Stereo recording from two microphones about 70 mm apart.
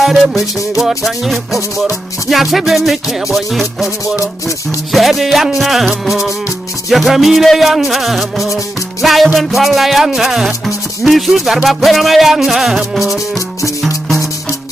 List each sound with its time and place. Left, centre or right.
0.0 s music: centre
6.9 s music: centre